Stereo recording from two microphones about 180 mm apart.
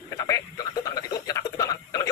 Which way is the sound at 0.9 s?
20° left (ahead or behind).